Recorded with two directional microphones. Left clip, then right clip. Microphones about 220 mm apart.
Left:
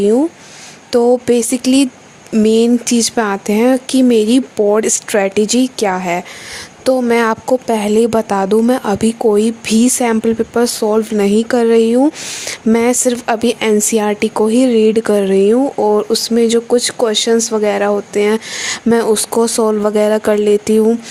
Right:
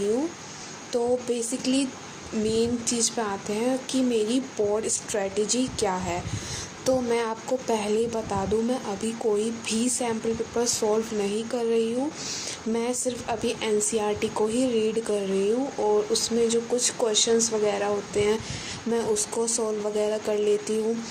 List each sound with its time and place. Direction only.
0.9 s a woman's voice: 50° left (ahead or behind)